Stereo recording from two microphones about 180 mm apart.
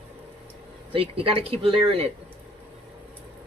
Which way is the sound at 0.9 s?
30° right (ahead or behind).